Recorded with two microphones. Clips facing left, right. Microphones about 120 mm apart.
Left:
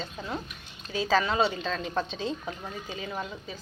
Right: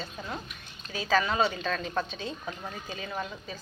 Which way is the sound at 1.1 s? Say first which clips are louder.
Even; 25° left (ahead or behind).